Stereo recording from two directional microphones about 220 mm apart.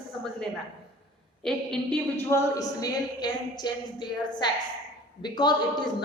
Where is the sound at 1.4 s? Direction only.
Centre (ahead or behind).